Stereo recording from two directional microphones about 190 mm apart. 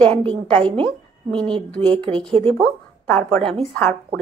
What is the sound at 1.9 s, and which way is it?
Speech, 25° right (ahead or behind).